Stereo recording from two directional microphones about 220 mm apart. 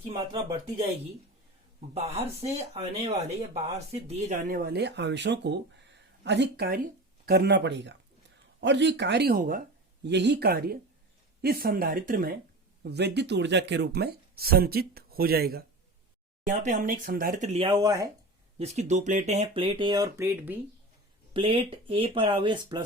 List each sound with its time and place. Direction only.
0.0 s speech: 25° right (ahead or behind)
1.9 s speech: 30° right (ahead or behind)
18.6 s speech: 30° right (ahead or behind); by 20.6 s 10° right (ahead or behind)
21.3 s speech: 25° right (ahead or behind)